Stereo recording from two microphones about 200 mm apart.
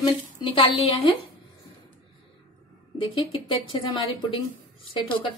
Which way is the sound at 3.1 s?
25° left (ahead or behind).